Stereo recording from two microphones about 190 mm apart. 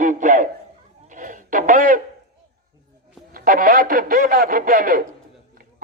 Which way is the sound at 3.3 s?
45° right (ahead or behind).